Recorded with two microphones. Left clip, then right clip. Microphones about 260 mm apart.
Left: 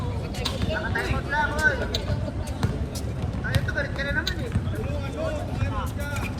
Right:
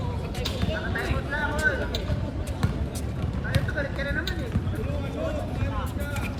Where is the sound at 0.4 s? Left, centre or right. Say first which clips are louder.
Left 3 dB; left.